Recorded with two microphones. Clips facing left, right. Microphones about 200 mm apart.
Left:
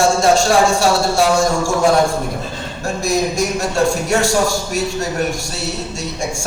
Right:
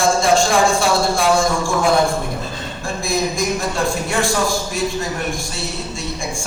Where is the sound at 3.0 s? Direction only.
45° left (ahead or behind).